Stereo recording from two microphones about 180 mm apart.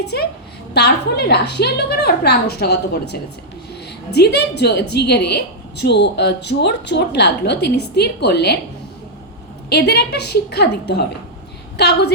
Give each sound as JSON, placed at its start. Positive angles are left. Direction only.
{"t": 0.0, "sound": "a woman's voice", "side_deg": 65}
{"t": 9.6, "sound": "a woman's voice", "side_deg": 65}